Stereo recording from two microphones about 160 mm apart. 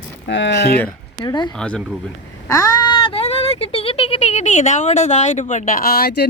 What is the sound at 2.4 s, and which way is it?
Speech, 20° left (ahead or behind).